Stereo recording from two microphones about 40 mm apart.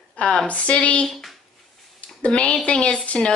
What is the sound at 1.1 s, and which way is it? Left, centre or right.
Speech, centre.